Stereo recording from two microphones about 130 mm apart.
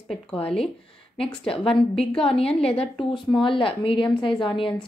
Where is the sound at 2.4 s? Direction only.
50° left (ahead or behind).